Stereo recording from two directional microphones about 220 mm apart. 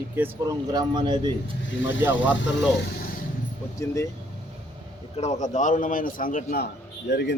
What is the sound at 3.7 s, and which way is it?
Speech, 15° left (ahead or behind).